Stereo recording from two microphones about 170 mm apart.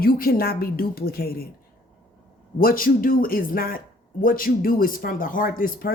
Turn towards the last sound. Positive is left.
turn(degrees=55)  # may be behind; listen again after turning